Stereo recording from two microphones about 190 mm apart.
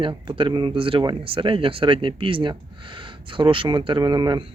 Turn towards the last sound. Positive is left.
turn(degrees=-20)  # may be behind; listen again after turning